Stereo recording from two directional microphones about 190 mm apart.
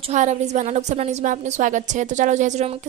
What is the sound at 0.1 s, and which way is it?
A woman's voice, 35° right (ahead or behind).